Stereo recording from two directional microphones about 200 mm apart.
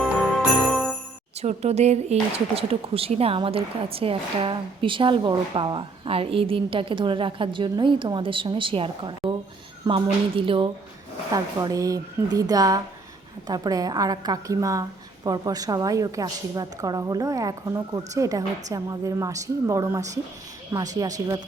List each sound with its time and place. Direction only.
0.0 s jingle bell: centre (ahead or behind)
1.4 s a woman's voice: 35° right (ahead or behind); by 21.4 s 20° right (ahead or behind)